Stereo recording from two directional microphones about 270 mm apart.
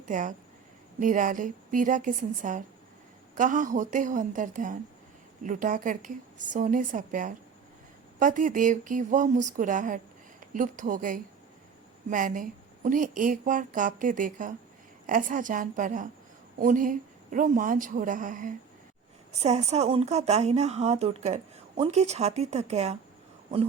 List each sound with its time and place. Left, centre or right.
0.0 s a woman's voice: right